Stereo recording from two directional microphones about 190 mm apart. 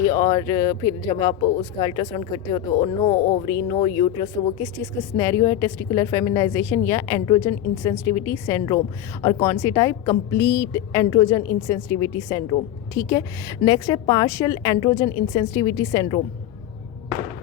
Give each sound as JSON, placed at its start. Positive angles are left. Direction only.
{"t": 0.1, "sound": "a woman's voice", "side_deg": 20}
{"t": 3.2, "sound": "speech", "side_deg": 45}
{"t": 3.4, "sound": "a woman's voice", "side_deg": 25}